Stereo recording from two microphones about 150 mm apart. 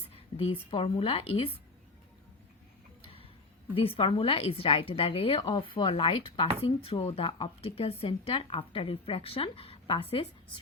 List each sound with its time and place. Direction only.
0.1 s speech: 40° left (ahead or behind)
3.0 s a sound: 40° left (ahead or behind)
3.8 s speech: 40° left (ahead or behind)